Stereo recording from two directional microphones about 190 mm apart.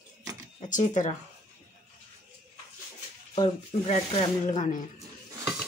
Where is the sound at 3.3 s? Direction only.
30° left (ahead or behind).